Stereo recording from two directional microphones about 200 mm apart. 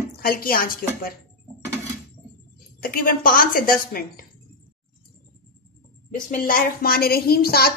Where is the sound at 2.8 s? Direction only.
45° left (ahead or behind).